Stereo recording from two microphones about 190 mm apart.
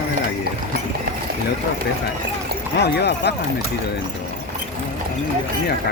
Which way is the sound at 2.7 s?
60° left (ahead or behind).